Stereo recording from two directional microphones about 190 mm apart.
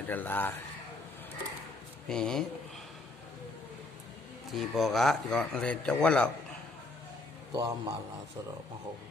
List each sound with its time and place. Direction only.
0.0 s speech: 10° left (ahead or behind)
2.0 s speech: 5° left (ahead or behind)
4.5 s speech: centre (ahead or behind)
7.5 s a man's voice: 20° right (ahead or behind)